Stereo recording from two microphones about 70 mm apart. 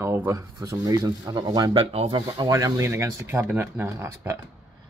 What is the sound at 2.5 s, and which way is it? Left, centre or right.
Speech, right.